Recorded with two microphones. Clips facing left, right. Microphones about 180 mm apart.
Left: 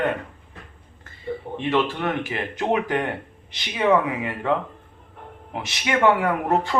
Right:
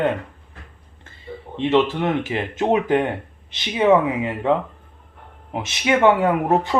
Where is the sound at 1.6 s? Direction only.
20° right (ahead or behind).